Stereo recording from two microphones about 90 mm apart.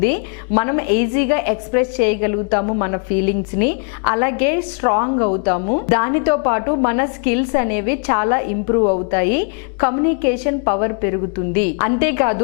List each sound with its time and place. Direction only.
0.0 s a woman's voice: 15° left (ahead or behind)